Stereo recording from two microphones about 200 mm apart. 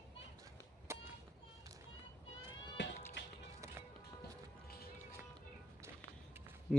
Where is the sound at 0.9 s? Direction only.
15° right (ahead or behind).